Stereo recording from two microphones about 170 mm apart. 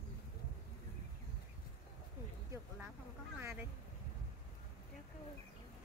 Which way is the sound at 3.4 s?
15° right (ahead or behind).